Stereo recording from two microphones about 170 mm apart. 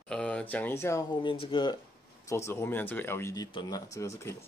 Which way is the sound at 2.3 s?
15° left (ahead or behind).